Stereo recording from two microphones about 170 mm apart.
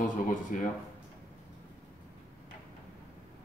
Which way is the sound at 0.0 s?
50° left (ahead or behind).